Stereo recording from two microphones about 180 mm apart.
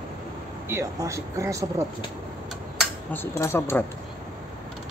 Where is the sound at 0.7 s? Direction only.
15° right (ahead or behind).